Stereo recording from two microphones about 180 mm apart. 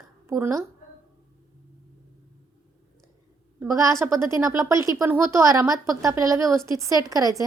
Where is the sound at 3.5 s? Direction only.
15° right (ahead or behind).